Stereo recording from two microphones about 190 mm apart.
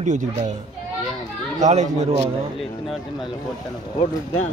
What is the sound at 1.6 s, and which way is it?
Speech, 35° right (ahead or behind).